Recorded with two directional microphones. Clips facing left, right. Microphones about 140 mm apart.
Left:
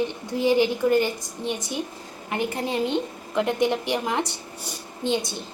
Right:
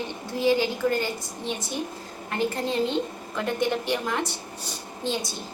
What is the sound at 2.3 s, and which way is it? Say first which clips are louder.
A woman's voice: even; 15° left (ahead or behind).